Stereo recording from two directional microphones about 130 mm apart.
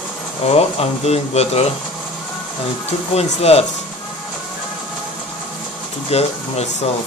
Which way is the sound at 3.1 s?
55° left (ahead or behind).